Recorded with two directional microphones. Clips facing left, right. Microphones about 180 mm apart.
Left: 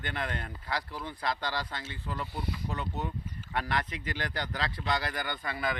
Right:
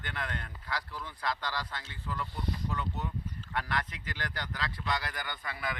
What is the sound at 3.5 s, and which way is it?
Speech, 25° left (ahead or behind).